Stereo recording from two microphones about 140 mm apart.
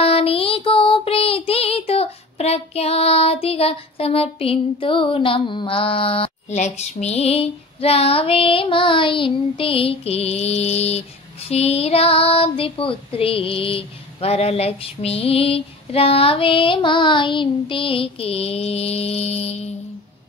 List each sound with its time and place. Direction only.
0.0 s child singing: 45° left (ahead or behind)